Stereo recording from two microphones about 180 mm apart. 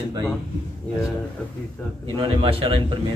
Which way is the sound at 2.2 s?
30° right (ahead or behind).